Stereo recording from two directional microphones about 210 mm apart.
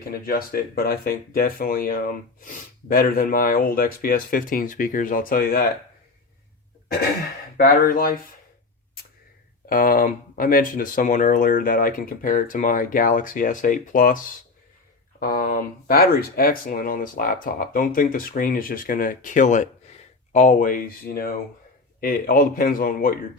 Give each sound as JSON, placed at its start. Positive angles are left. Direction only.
{"t": 0.1, "sound": "speech", "side_deg": 45}
{"t": 7.5, "sound": "speech", "side_deg": 45}
{"t": 9.6, "sound": "speech", "side_deg": 45}
{"t": 15.2, "sound": "speech", "side_deg": 45}